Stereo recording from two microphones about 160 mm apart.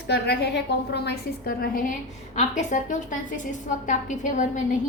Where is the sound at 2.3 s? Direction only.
50° left (ahead or behind).